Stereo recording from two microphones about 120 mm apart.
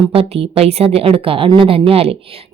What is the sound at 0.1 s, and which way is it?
A woman's voice, 55° right (ahead or behind).